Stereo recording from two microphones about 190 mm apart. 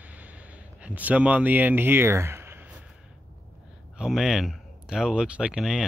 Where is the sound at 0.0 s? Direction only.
10° right (ahead or behind).